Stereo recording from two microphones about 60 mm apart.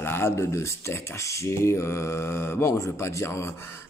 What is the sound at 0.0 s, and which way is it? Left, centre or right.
Speech, left.